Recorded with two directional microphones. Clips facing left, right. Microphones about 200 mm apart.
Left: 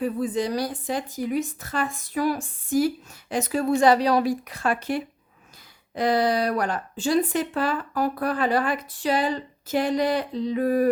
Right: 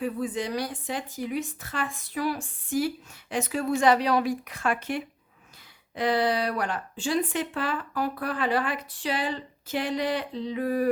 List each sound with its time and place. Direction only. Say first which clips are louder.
0.0 s speech: left 4 dB; 40° left (ahead or behind)